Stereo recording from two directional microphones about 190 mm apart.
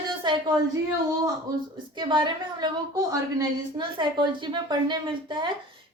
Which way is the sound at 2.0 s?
25° right (ahead or behind).